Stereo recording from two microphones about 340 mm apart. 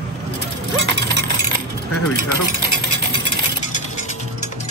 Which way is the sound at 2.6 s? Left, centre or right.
Right.